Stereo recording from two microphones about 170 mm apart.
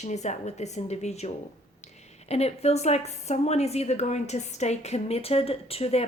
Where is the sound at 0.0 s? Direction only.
40° left (ahead or behind).